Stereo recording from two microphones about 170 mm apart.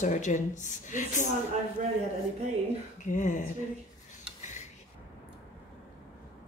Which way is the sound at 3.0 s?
50° left (ahead or behind).